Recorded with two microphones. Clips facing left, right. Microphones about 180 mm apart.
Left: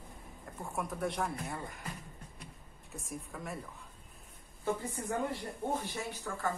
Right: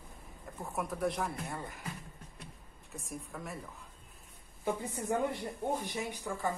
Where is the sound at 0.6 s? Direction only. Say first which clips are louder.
Right 2 dB; centre (ahead or behind).